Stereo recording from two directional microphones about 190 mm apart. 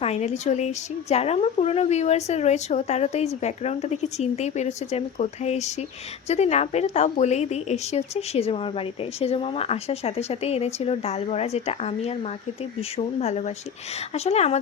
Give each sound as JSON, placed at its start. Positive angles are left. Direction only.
{"t": 0.0, "sound": "speech", "side_deg": 35}